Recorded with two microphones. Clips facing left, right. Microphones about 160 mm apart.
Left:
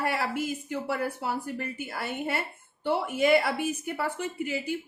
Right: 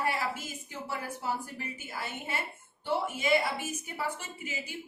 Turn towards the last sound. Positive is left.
turn(degrees=55)  # may be behind; listen again after turning